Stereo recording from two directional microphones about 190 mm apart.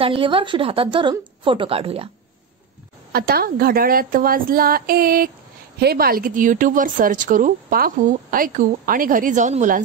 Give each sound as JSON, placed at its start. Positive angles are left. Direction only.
{"t": 0.0, "sound": "a woman's voice", "side_deg": -30}
{"t": 3.1, "sound": "a woman's voice", "side_deg": -55}